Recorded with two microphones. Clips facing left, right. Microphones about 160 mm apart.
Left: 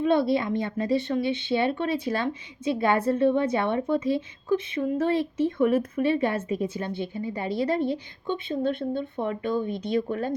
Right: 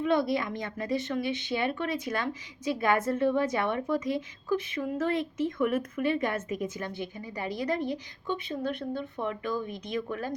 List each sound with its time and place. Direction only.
0.0 s a woman's voice: 25° left (ahead or behind)